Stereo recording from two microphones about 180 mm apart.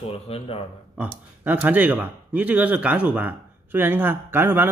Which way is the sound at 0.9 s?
10° right (ahead or behind).